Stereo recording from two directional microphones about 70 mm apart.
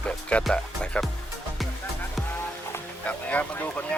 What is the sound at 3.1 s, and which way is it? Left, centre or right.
Speech, left.